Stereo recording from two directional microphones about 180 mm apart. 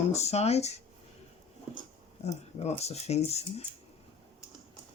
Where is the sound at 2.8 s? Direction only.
35° left (ahead or behind).